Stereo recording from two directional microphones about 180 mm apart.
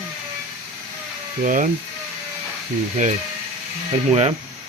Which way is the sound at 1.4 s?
45° right (ahead or behind).